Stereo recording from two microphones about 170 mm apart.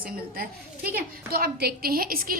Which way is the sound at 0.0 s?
60° right (ahead or behind).